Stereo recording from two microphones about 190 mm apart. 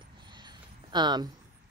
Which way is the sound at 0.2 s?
25° right (ahead or behind).